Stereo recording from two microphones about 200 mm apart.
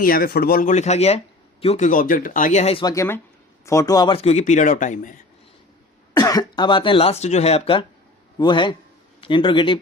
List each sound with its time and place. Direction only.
0.0 s speech: 50° left (ahead or behind); by 2.9 s 30° left (ahead or behind)
2.9 s speech: 15° left (ahead or behind); by 5.1 s 40° left (ahead or behind)
6.1 s speech: 20° left (ahead or behind)